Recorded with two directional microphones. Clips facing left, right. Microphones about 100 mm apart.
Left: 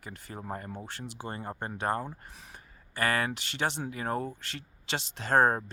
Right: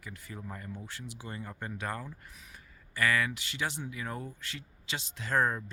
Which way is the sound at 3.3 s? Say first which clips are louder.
Left 4 dB; 65° left (ahead or behind).